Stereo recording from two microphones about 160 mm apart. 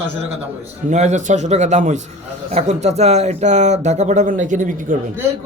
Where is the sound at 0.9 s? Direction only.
45° right (ahead or behind).